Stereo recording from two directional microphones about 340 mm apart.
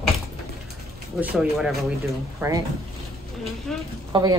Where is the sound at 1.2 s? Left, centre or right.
Centre.